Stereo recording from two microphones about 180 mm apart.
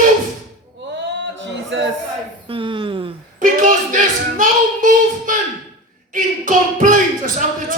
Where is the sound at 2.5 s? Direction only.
30° right (ahead or behind).